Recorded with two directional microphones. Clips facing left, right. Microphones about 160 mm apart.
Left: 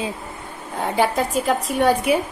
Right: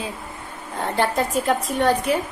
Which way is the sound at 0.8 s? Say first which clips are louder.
Left 2 dB; 5° left (ahead or behind).